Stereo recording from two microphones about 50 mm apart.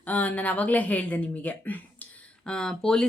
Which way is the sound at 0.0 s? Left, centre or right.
Left.